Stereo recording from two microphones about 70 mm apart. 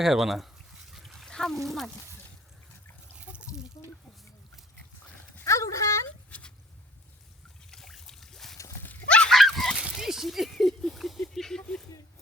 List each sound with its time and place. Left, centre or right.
0.0 s a sound: centre
3.2 s water: centre
5.4 s dog: left
6.3 s a sound: left
7.7 s trickle: centre
9.0 s dog: centre
9.3 s dog: centre
9.9 s speech: centre